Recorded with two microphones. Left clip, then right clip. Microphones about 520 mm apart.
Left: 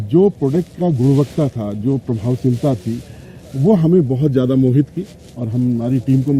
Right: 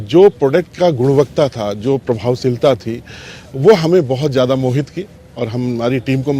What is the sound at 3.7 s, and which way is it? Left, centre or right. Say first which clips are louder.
A man's voice: right 2 dB; right.